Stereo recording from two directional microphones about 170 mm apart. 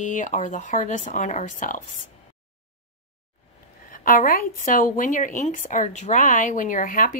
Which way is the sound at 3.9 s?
55° left (ahead or behind).